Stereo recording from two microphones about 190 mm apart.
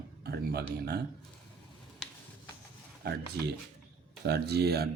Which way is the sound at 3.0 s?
55° right (ahead or behind).